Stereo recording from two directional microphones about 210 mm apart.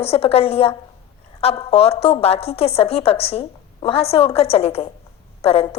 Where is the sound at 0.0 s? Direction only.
30° left (ahead or behind).